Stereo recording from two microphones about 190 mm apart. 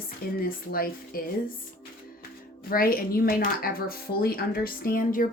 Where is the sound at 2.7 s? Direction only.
50° left (ahead or behind).